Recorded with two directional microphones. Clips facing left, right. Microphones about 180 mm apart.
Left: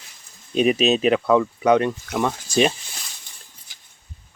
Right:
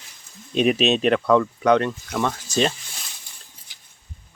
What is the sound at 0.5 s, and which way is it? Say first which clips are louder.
Speech: left 1 dB; centre (ahead or behind).